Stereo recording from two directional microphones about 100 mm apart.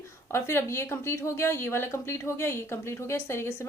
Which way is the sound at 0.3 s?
25° left (ahead or behind).